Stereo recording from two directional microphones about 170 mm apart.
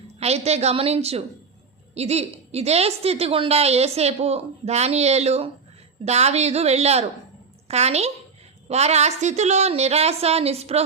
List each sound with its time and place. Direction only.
0.2 s a woman's voice: 40° right (ahead or behind)